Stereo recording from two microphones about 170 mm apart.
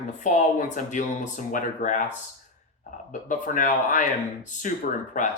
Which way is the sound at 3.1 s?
50° left (ahead or behind).